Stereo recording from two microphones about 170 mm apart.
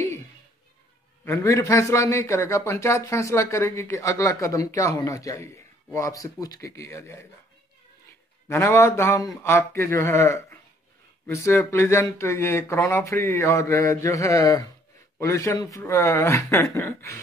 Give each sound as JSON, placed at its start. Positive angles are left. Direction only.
{"t": 1.2, "sound": "a man's voice", "side_deg": 15}
{"t": 8.5, "sound": "a man's voice", "side_deg": 15}